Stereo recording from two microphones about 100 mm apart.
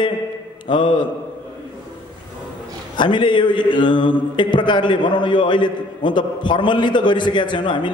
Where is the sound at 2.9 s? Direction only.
50° left (ahead or behind).